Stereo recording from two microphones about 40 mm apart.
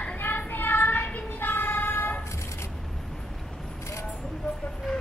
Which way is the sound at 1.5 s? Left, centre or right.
Left.